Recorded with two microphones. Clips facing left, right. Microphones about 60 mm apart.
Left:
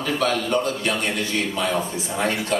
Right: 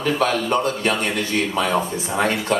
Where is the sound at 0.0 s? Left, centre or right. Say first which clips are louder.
Right 2 dB; right.